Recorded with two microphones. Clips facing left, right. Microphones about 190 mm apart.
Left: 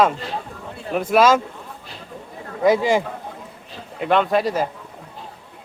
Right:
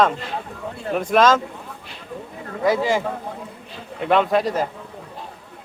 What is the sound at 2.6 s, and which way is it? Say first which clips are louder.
Speech: left 3 dB; 15° left (ahead or behind).